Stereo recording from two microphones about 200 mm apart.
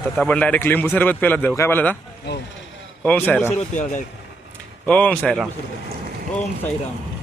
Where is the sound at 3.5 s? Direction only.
35° left (ahead or behind).